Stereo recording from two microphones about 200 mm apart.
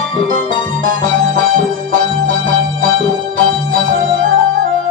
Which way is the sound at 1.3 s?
40° right (ahead or behind).